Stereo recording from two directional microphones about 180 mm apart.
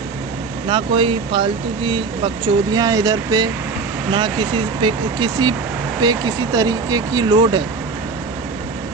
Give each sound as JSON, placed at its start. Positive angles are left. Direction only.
{"t": 0.7, "sound": "speech", "side_deg": -25}